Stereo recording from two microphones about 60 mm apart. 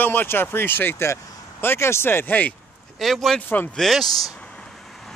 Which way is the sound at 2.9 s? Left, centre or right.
Centre.